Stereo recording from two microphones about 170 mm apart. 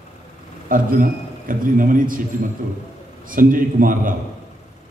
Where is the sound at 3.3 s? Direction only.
55° right (ahead or behind).